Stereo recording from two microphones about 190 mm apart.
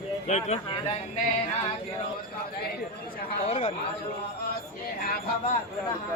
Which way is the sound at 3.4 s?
30° left (ahead or behind).